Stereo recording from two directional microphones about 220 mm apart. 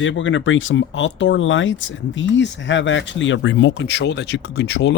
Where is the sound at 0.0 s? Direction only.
60° left (ahead or behind).